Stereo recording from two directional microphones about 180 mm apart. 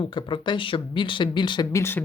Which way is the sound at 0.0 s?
25° left (ahead or behind).